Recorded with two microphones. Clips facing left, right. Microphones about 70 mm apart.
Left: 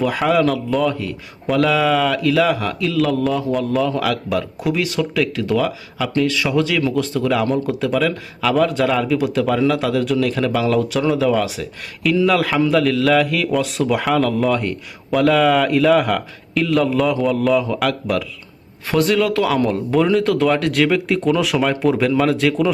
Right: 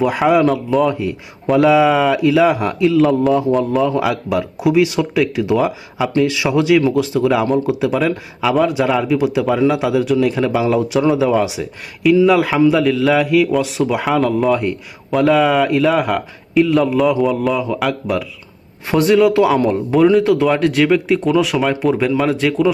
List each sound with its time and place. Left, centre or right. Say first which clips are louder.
0.0 s speech: right 3 dB; centre
0.9 s speech: right 3 dB; centre
18.9 s speech: right 4 dB; centre